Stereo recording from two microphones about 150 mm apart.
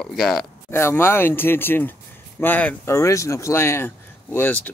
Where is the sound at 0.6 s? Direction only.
15° left (ahead or behind).